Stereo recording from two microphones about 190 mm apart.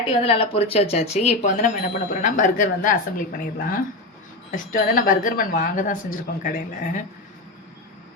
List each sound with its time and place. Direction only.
0.1 s a woman's voice: 30° left (ahead or behind)